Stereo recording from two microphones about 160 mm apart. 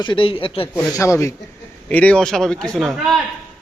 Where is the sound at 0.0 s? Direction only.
30° left (ahead or behind).